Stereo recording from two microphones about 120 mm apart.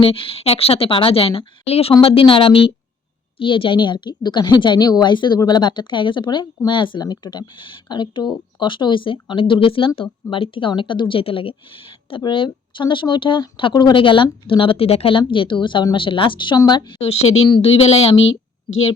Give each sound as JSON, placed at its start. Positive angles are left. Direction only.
{"t": 0.0, "sound": "a woman's voice", "side_deg": 50}
{"t": 17.0, "sound": "speech", "side_deg": 60}